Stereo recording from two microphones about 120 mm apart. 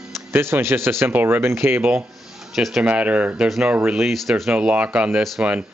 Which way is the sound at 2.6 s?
Centre (ahead or behind).